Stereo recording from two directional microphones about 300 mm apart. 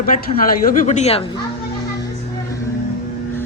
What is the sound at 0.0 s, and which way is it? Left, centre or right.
A woman's voice, left.